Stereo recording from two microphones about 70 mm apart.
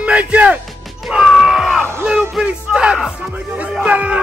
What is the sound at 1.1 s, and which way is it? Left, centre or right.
Music, centre.